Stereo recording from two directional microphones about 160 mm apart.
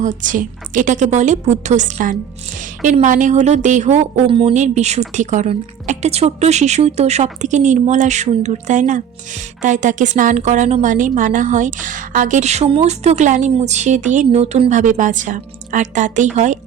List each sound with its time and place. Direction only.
0.0 s a woman's voice: 50° right (ahead or behind); by 4.5 s 35° right (ahead or behind)
4.5 s a woman's voice: 45° right (ahead or behind)